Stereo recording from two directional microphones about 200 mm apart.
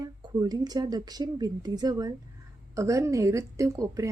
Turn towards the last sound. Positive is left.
turn(degrees=-15)  # may be behind; listen again after turning